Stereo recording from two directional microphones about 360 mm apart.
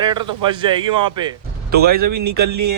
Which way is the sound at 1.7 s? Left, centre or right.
Right.